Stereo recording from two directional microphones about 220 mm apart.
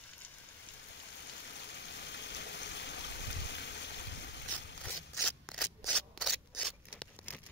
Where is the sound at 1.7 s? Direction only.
50° left (ahead or behind).